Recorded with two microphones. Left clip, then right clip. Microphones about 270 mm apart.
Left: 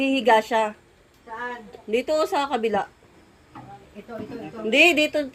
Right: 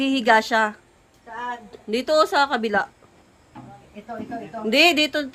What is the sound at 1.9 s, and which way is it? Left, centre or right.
Speech, centre.